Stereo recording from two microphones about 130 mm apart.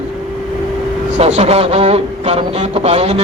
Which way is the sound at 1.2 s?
55° right (ahead or behind).